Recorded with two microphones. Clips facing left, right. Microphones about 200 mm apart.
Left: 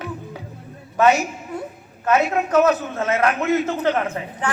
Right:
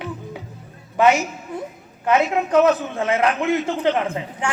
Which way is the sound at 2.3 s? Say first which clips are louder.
Right 1 dB; 15° right (ahead or behind).